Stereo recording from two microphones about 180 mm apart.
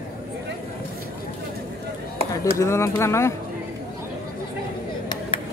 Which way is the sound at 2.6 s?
15° left (ahead or behind).